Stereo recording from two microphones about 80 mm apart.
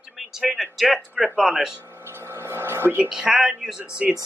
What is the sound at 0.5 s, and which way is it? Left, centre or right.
Speech, centre.